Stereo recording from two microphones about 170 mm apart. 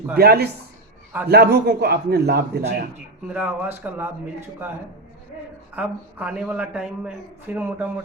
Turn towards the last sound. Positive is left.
turn(degrees=-10)  # may be behind; listen again after turning